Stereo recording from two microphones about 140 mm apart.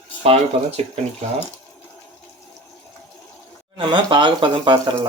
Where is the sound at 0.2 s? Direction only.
50° right (ahead or behind).